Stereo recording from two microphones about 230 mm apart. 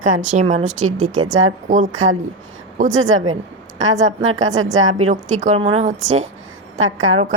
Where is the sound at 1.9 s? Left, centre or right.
Right.